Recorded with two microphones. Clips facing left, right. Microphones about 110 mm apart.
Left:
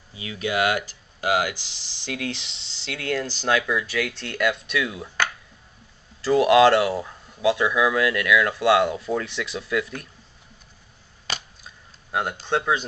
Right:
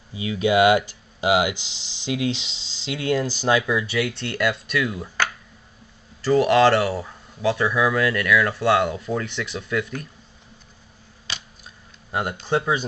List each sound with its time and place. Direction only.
0.1 s speech: 20° right (ahead or behind); by 5.1 s centre (ahead or behind)
6.2 s speech: centre (ahead or behind)
11.3 s a sound: 45° left (ahead or behind)
11.6 s tick-tock: centre (ahead or behind)
12.4 s speech: 5° right (ahead or behind)